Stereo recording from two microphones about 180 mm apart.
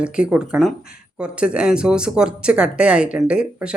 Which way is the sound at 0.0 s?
5° right (ahead or behind).